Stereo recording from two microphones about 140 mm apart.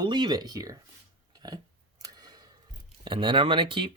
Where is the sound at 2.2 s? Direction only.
30° right (ahead or behind).